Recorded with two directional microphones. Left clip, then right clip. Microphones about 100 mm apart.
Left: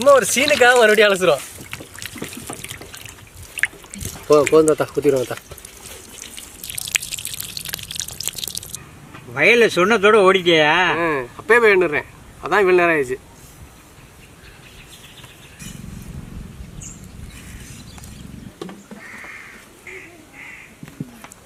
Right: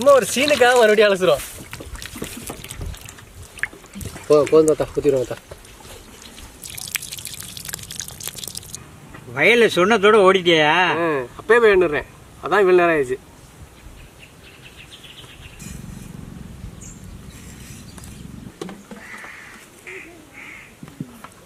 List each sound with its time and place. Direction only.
0.0 s speech: centre (ahead or behind)
0.9 s water: 5° left (ahead or behind)
4.4 s speech: 20° left (ahead or behind)
6.7 s a sound: centre (ahead or behind)
9.3 s speech: 15° right (ahead or behind)
10.9 s speech: 5° left (ahead or behind)